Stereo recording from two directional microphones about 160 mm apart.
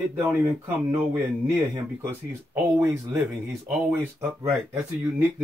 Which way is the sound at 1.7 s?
10° right (ahead or behind).